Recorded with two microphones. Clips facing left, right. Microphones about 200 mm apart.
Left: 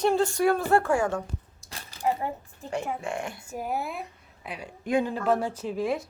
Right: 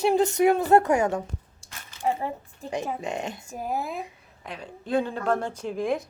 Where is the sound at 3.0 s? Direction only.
20° right (ahead or behind).